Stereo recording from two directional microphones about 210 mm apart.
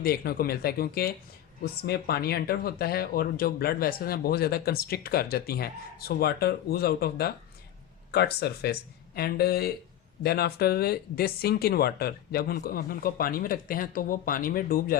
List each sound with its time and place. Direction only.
0.0 s speech: 45° left (ahead or behind)